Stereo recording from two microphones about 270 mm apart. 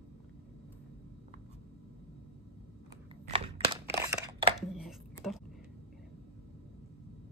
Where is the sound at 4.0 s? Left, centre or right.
Centre.